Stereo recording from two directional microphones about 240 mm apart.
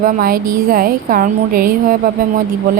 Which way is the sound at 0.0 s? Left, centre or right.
Right.